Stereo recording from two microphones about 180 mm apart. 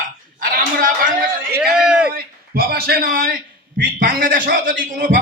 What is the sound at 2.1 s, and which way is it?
A man's voice, 55° right (ahead or behind).